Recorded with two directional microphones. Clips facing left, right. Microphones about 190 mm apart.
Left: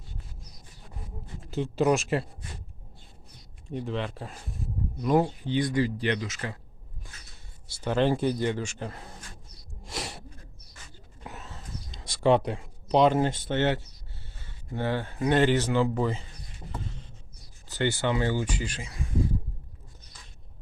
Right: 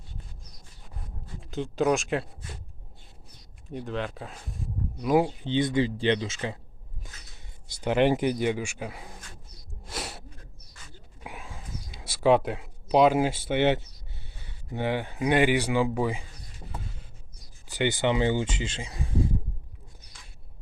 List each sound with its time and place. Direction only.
1.0 s a sound: centre (ahead or behind)
3.7 s speech: centre (ahead or behind)
5.5 s speech: 25° right (ahead or behind)
7.7 s speech: 15° right (ahead or behind)
9.8 s snort: centre (ahead or behind)
11.2 s a sound: 10° right (ahead or behind)
14.4 s speech: 15° right (ahead or behind)
17.7 s speech: 15° right (ahead or behind)